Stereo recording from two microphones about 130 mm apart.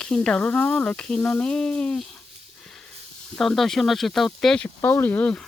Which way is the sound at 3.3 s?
Centre (ahead or behind).